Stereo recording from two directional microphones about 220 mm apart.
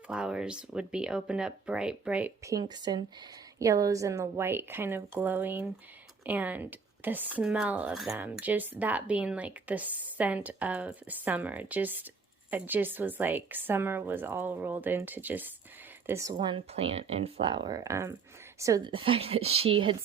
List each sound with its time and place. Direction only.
0.1 s speech: 5° right (ahead or behind); by 20.0 s 25° right (ahead or behind)